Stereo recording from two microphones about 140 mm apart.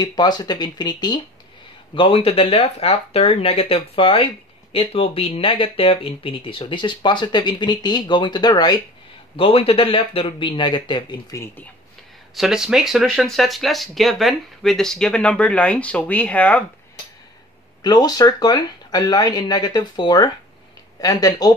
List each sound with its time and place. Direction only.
0.0 s speech: 30° left (ahead or behind)
9.4 s speech: 40° left (ahead or behind)
12.4 s speech: 5° right (ahead or behind)
17.8 s speech: 30° left (ahead or behind)